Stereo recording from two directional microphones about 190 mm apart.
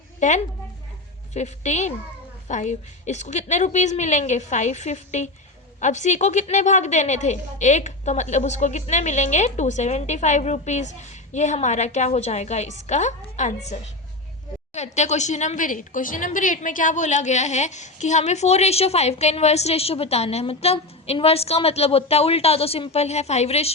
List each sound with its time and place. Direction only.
0.2 s a woman's voice: 40° left (ahead or behind)